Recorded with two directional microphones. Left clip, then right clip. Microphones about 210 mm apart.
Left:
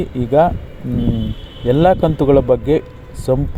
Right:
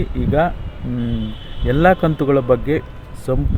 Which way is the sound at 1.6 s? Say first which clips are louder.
Left 2 dB; 15° left (ahead or behind).